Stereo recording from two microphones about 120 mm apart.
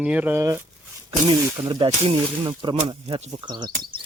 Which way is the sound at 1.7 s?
45° right (ahead or behind).